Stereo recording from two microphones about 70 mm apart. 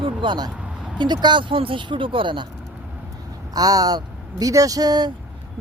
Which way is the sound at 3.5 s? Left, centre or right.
Right.